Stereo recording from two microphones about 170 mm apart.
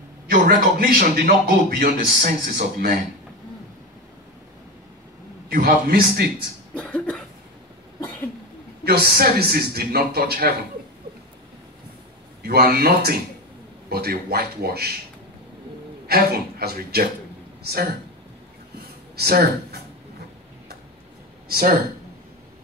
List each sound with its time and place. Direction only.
0.3 s a man's voice: 65° right (ahead or behind)
5.5 s a man's voice: 65° right (ahead or behind)
6.7 s cough: 5° left (ahead or behind)
8.8 s a man's voice: 65° right (ahead or behind)
12.4 s a man's voice: 65° right (ahead or behind)
16.1 s a man's voice: 65° right (ahead or behind)
18.8 s a sound: 65° right (ahead or behind)
21.5 s a man's voice: 60° right (ahead or behind)